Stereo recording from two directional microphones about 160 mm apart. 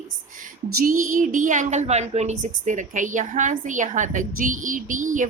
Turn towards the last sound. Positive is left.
turn(degrees=-50)  # may be behind; listen again after turning